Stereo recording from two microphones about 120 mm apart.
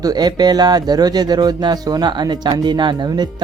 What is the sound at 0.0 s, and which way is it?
Speech, 35° right (ahead or behind).